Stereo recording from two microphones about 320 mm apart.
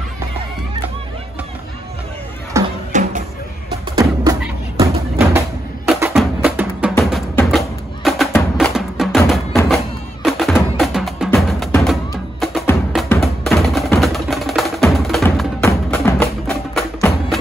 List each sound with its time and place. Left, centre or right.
2.5 s music: centre
2.9 s music: right
4.0 s music: centre